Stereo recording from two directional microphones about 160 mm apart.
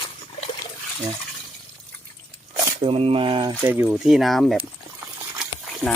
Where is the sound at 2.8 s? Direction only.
35° right (ahead or behind).